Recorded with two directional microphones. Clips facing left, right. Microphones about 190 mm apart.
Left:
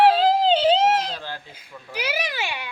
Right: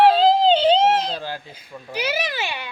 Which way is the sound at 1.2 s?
15° right (ahead or behind).